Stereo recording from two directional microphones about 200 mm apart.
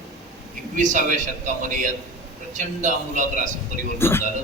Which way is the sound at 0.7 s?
40° right (ahead or behind).